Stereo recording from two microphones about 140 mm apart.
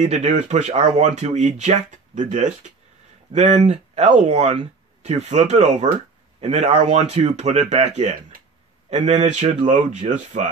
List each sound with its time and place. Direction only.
0.0 s speech: 55° right (ahead or behind)